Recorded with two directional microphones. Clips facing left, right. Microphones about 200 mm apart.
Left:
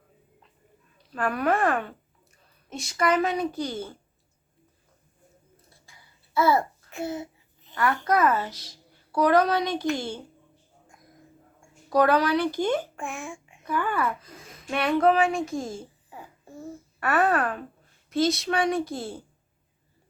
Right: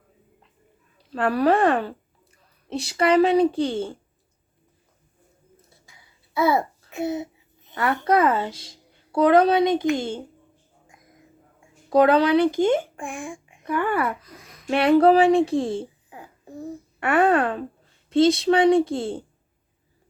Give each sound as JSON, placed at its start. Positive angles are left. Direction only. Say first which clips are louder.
{"t": 0.9, "sound": "a woman's voice", "louder": "right 6 dB", "side_deg": -30}
{"t": 5.9, "sound": "babbling", "louder": "left 2 dB", "side_deg": -20}
{"t": 11.9, "sound": "a woman's voice", "louder": "right 4 dB", "side_deg": -25}
{"t": 13.7, "sound": "a woman's voice", "louder": "right 3 dB", "side_deg": -25}
{"t": 14.2, "sound": "a sound", "louder": "even", "side_deg": 25}
{"t": 14.7, "sound": "speech", "louder": "right 6 dB", "side_deg": -30}
{"t": 16.1, "sound": "a child's voice", "louder": "right 3 dB", "side_deg": -15}